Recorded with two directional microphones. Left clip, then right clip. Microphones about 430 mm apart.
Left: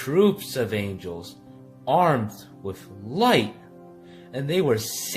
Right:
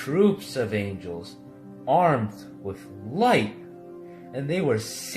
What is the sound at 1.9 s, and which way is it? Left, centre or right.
Speech, left.